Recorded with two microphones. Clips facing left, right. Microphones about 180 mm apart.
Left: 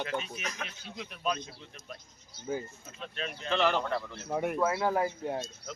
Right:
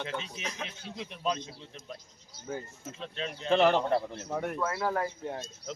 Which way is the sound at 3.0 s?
25° right (ahead or behind).